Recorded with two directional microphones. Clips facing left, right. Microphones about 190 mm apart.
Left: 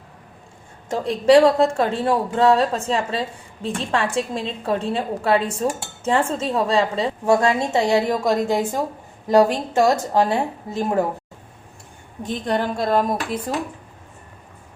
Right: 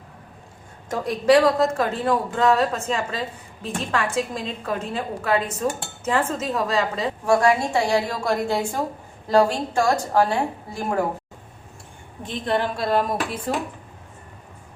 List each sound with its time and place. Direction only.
0.9 s speech: 30° left (ahead or behind)
12.2 s a woman's voice: 45° left (ahead or behind)